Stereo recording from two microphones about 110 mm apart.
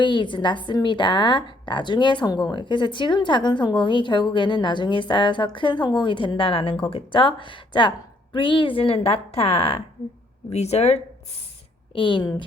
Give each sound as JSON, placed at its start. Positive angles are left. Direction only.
{"t": 0.0, "sound": "a woman's voice", "side_deg": 45}
{"t": 10.5, "sound": "speech", "side_deg": 80}
{"t": 11.9, "sound": "a woman's voice", "side_deg": 50}